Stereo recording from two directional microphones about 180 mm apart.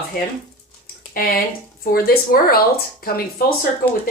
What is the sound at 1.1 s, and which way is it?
Speech, 55° left (ahead or behind).